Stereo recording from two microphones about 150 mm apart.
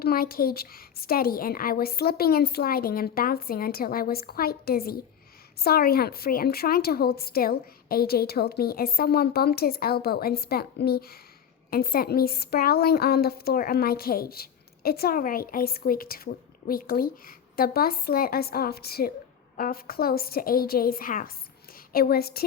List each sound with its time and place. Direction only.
0.0 s a woman's voice: 85° left
11.7 s a woman's voice: 80° left
19.5 s a woman's voice: 75° left (ahead or behind)
21.9 s a woman's voice: 90° left